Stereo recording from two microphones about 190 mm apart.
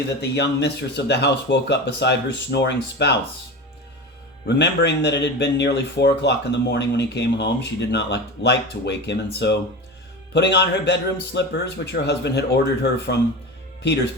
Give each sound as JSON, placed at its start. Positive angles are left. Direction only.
{"t": 0.2, "sound": "speech", "side_deg": 60}
{"t": 4.4, "sound": "speech", "side_deg": 65}